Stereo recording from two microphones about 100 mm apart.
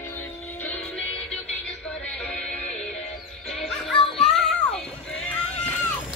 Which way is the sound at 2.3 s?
10° left (ahead or behind).